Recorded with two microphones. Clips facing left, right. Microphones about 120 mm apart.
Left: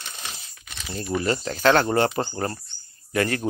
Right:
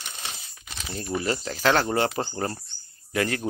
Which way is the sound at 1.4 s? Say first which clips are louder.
Left 4 dB; 5° right (ahead or behind).